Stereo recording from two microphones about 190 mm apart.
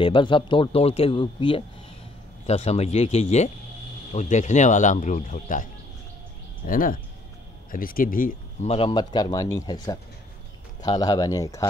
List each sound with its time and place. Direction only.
0.0 s speech: 25° left (ahead or behind); by 8.4 s 45° left (ahead or behind)
8.6 s speech: 30° left (ahead or behind)